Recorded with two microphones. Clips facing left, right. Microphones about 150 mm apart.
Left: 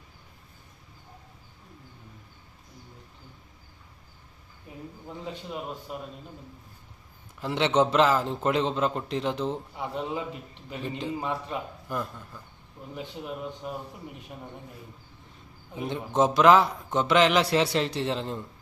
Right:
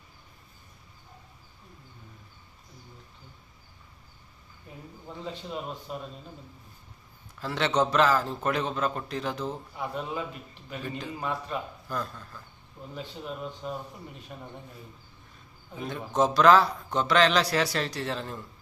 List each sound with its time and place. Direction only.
4.7 s a sound: 10° left (ahead or behind)
5.2 s a man's voice: 10° left (ahead or behind)
7.3 s a man's voice: 20° left (ahead or behind)
15.7 s a man's voice: 20° left (ahead or behind)